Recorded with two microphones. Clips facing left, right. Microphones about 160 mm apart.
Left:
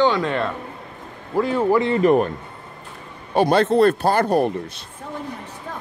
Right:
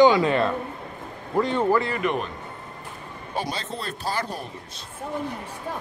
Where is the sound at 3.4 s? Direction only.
60° left (ahead or behind).